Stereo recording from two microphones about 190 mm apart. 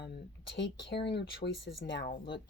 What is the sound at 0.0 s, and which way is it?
Speech, 65° left (ahead or behind).